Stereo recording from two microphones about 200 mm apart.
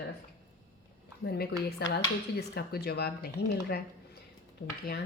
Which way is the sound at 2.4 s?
50° left (ahead or behind).